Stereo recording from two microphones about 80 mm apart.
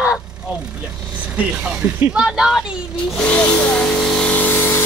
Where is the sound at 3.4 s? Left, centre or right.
Centre.